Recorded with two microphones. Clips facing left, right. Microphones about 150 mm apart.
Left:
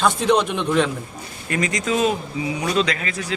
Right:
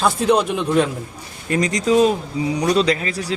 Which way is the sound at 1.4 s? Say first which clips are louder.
Right 5 dB; 35° right (ahead or behind).